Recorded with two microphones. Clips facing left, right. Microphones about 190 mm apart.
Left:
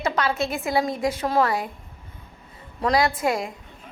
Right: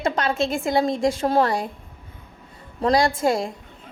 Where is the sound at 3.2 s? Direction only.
30° right (ahead or behind).